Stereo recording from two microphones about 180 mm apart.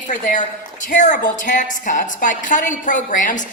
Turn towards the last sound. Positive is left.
turn(degrees=45)  # may be behind; listen again after turning